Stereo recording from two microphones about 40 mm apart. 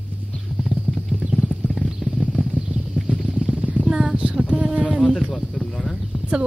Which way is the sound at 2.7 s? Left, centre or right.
Right.